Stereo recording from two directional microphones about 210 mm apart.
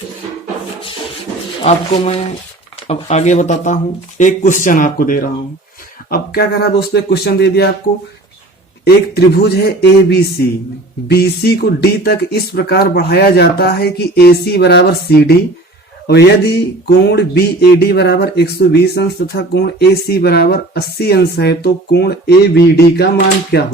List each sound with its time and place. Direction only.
1.6 s speech: 30° left (ahead or behind); by 7.7 s 50° left (ahead or behind)
8.9 s speech: 50° left (ahead or behind)